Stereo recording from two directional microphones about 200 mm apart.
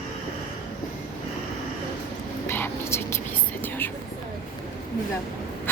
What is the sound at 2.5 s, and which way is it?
Whispering, 10° left (ahead or behind).